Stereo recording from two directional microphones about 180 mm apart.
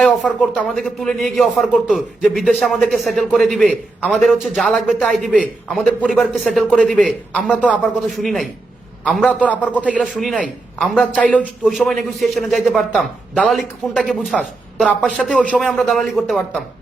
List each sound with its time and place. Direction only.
0.0 s a man's voice: centre (ahead or behind)